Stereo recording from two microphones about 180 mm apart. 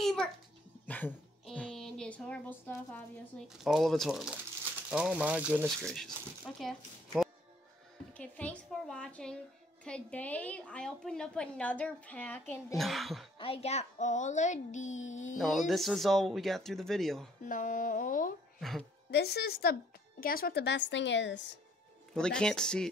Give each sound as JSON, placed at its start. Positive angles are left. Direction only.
{"t": 0.0, "sound": "a sound", "side_deg": 5}
{"t": 0.8, "sound": "a woman's voice", "side_deg": 10}
{"t": 5.9, "sound": "speech", "side_deg": 0}
{"t": 8.1, "sound": "a woman's voice", "side_deg": 10}
{"t": 13.4, "sound": "speech", "side_deg": 35}
{"t": 15.3, "sound": "speech", "side_deg": 0}
{"t": 17.5, "sound": "speech", "side_deg": 45}
{"t": 18.6, "sound": "a woman's voice", "side_deg": 0}
{"t": 19.0, "sound": "speech", "side_deg": 65}
{"t": 22.1, "sound": "speech", "side_deg": 5}